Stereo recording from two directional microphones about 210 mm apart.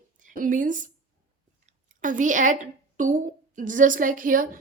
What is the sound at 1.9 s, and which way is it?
A woman's voice, 40° right (ahead or behind).